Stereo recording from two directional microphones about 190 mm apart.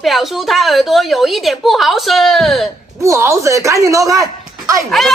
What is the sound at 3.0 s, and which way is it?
Speech, 15° right (ahead or behind).